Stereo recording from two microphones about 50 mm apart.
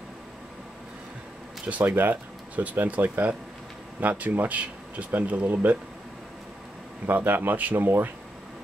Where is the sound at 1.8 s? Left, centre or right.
Right.